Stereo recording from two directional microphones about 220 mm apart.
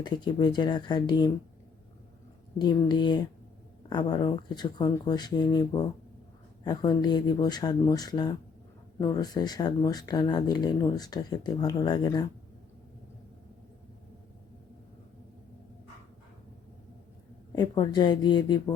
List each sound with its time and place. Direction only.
0.0 s speech: 20° left (ahead or behind)
2.6 s speech: 20° left (ahead or behind)
17.5 s speech: 20° left (ahead or behind)